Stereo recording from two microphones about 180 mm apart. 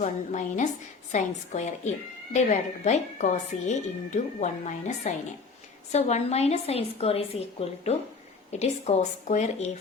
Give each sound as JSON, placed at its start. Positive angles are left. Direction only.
{"t": 0.0, "sound": "a woman's voice", "side_deg": 45}